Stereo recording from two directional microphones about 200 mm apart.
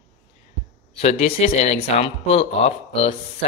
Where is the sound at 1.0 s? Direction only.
30° left (ahead or behind).